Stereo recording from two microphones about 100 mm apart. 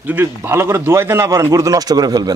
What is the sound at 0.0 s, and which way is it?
A man's voice, 15° right (ahead or behind).